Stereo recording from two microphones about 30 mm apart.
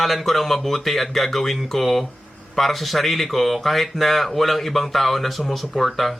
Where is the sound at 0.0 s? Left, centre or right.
Centre.